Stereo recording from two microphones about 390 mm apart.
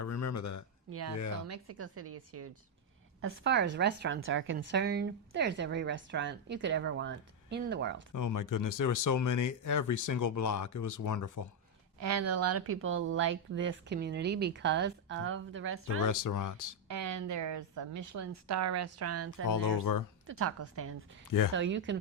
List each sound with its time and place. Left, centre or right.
0.0 s a sound: left
0.9 s a woman's voice: right
8.1 s speech: left
11.9 s a woman's voice: right
16.0 s speech: left
16.9 s a woman's voice: right
19.5 s speech: left
20.2 s a woman's voice: right